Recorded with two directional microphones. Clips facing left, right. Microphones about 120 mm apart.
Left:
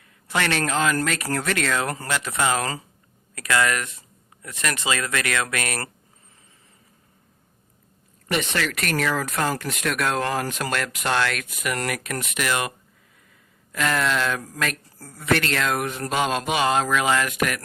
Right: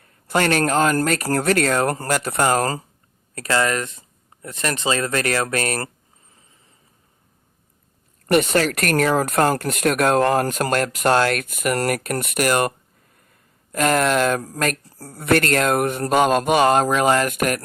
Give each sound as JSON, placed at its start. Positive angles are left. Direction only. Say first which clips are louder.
{"t": 0.0, "sound": "speech", "louder": "right 5 dB", "side_deg": -40}
{"t": 3.3, "sound": "speech", "louder": "right 2 dB", "side_deg": -30}
{"t": 8.3, "sound": "speech", "louder": "right 8 dB", "side_deg": -45}
{"t": 13.7, "sound": "speech", "louder": "right 5 dB", "side_deg": -50}
{"t": 14.4, "sound": "speech", "louder": "right 5 dB", "side_deg": -35}
{"t": 15.2, "sound": "speech", "louder": "right 5 dB", "side_deg": -50}